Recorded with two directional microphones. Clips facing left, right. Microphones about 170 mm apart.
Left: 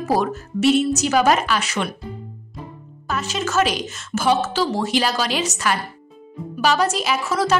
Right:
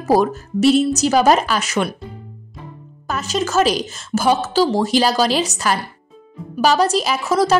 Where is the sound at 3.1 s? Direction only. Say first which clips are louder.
Right 3 dB; 40° right (ahead or behind).